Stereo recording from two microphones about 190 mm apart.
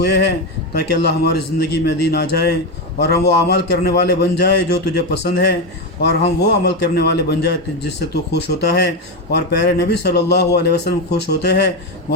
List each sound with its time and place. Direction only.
0.0 s a man's voice: 60° left (ahead or behind)